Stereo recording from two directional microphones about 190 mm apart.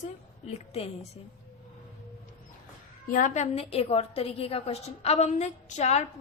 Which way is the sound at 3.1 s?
40° left (ahead or behind).